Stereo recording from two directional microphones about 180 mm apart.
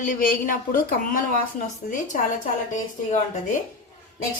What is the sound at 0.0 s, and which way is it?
A woman's voice, 45° left (ahead or behind).